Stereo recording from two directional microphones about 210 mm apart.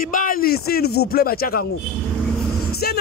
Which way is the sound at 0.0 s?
40° left (ahead or behind).